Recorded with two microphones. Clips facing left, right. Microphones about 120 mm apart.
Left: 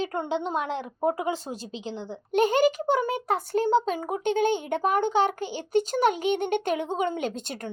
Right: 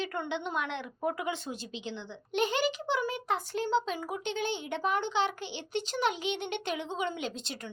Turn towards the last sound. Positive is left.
turn(degrees=50)  # may be behind; listen again after turning